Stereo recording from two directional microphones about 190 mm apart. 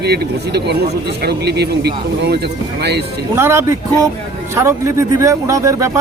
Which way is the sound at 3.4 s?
15° right (ahead or behind).